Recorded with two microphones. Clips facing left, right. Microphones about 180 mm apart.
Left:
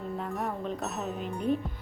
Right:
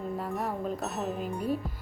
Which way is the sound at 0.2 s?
Centre (ahead or behind).